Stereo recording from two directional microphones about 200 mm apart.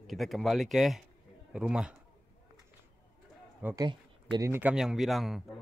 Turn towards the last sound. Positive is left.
turn(degrees=0)  # may be behind; listen again after turning